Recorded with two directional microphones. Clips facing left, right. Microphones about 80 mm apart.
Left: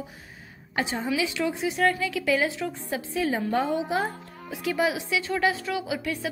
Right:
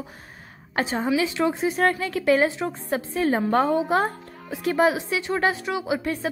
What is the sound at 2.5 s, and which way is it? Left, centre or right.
Speech, right.